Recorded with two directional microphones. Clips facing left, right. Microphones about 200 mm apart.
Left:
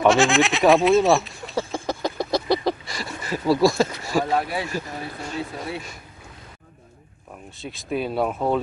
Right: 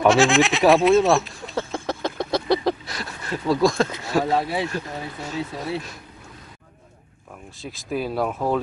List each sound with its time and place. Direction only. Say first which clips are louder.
0.0 s a sound: right 1 dB; centre (ahead or behind)
4.3 s speech: right 1 dB; 25° right (ahead or behind)
4.6 s speech: right 1 dB; centre (ahead or behind)
7.6 s speech: even; centre (ahead or behind)